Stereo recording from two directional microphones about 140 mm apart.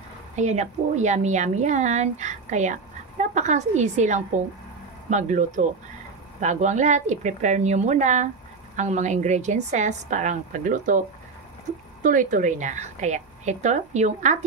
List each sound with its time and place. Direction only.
0.4 s speech: 55° right (ahead or behind)
12.0 s speech: 65° right (ahead or behind)